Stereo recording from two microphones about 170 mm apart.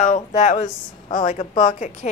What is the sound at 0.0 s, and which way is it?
A woman's voice, 45° left (ahead or behind).